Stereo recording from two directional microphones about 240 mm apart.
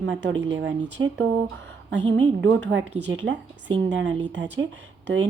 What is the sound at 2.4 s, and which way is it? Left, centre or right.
Speech, right.